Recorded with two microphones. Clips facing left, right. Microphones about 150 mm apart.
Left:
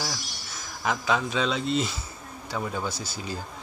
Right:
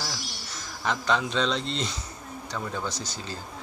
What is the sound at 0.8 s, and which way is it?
Speech, 5° left (ahead or behind).